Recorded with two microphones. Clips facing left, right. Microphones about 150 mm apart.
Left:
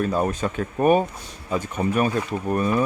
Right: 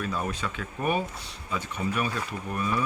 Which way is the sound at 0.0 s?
45° left (ahead or behind).